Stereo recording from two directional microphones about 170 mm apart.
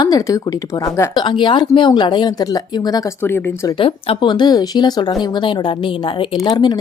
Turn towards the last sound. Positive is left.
turn(degrees=25)  # may be behind; listen again after turning